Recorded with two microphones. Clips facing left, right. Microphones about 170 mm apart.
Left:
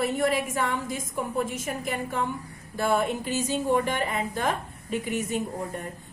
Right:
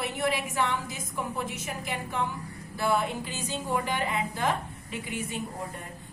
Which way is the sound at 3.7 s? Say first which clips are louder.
Left 2 dB; 45° left (ahead or behind).